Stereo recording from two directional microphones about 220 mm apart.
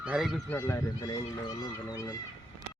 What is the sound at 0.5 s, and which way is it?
Speech, 15° left (ahead or behind).